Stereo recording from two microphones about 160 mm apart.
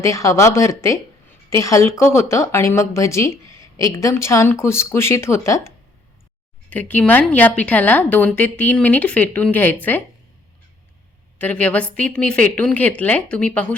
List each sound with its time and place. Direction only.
0.0 s a woman's voice: 20° left (ahead or behind)
11.3 s a woman's voice: 10° left (ahead or behind)